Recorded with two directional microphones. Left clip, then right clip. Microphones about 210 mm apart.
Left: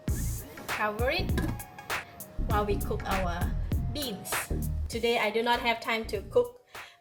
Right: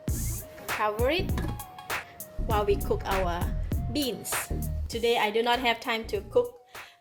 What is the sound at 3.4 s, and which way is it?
Music, centre (ahead or behind).